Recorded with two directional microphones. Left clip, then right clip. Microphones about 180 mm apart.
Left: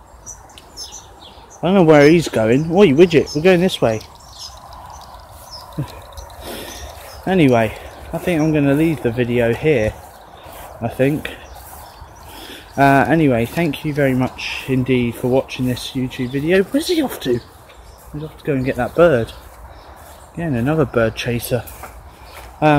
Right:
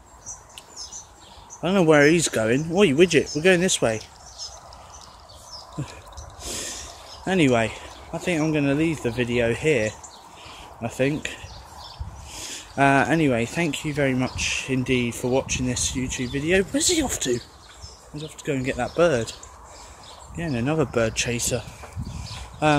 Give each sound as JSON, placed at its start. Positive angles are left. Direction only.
{"t": 1.6, "sound": "speech", "side_deg": 5}
{"t": 5.8, "sound": "speech", "side_deg": -5}
{"t": 6.4, "sound": "a sound", "side_deg": -5}
{"t": 7.2, "sound": "speech", "side_deg": 0}
{"t": 20.3, "sound": "speech", "side_deg": -10}